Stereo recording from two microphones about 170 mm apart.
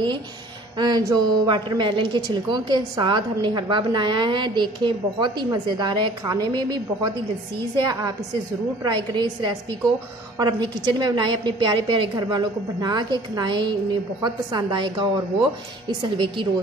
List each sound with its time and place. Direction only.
0.7 s a woman's voice: 25° right (ahead or behind)